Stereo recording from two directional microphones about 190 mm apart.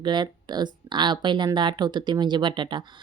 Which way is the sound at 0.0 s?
25° right (ahead or behind).